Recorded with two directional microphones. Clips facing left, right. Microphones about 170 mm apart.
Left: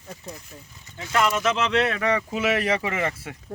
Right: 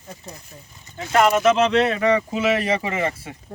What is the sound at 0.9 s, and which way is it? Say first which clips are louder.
Speech: right 6 dB; 50° right (ahead or behind).